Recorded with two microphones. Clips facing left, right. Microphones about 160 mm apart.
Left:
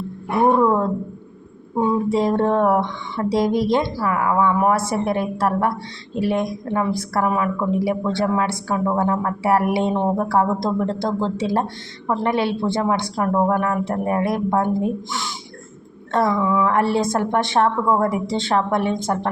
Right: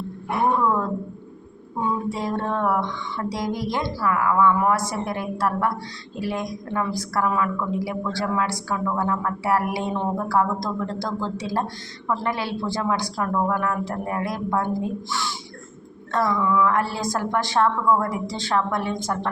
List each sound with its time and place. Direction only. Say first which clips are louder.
0.6 s a woman's voice: left 5 dB; 25° left (ahead or behind)
2.0 s a woman's voice: left 8 dB; 25° left (ahead or behind)